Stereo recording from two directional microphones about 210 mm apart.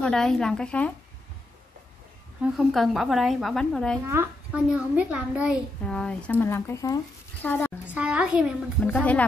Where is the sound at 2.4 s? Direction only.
Centre (ahead or behind).